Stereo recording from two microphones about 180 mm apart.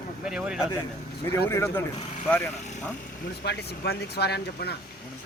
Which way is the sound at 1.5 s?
15° left (ahead or behind).